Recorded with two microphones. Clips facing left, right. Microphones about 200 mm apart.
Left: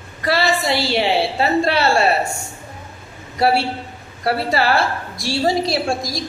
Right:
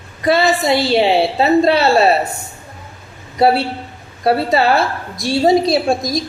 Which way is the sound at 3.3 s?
20° right (ahead or behind).